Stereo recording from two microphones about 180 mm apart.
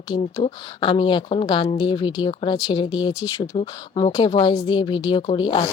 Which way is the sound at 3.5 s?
30° left (ahead or behind).